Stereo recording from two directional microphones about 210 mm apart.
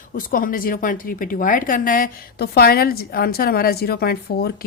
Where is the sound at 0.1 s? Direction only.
45° left (ahead or behind).